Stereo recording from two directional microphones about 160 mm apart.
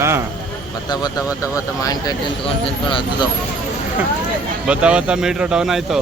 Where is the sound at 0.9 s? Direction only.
25° left (ahead or behind).